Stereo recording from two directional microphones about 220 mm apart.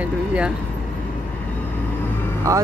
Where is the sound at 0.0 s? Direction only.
5° right (ahead or behind).